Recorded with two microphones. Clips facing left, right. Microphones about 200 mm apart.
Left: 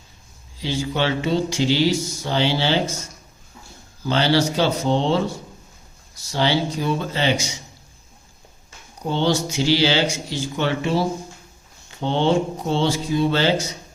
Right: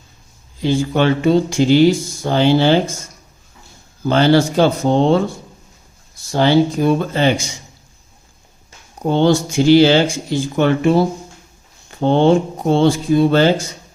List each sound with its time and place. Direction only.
0.6 s speech: 50° right (ahead or behind)
4.0 s speech: 50° right (ahead or behind)
6.3 s speech: 50° right (ahead or behind)
9.0 s speech: 50° right (ahead or behind)